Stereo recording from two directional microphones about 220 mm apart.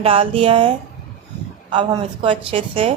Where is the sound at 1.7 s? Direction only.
20° right (ahead or behind).